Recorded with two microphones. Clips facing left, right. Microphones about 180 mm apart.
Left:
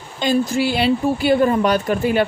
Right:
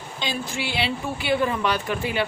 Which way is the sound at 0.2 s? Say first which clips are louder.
Left 12 dB; 45° left (ahead or behind).